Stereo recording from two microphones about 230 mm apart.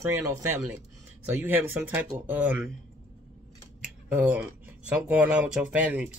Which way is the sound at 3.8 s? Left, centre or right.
Centre.